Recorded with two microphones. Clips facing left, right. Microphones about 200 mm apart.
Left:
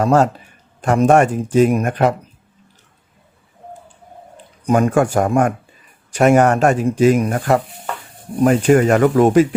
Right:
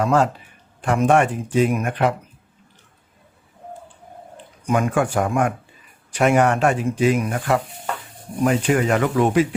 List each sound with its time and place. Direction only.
0.0 s a man's voice: 40° left (ahead or behind)
4.6 s a man's voice: 40° left (ahead or behind)